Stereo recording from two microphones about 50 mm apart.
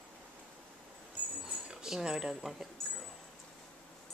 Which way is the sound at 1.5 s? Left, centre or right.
Centre.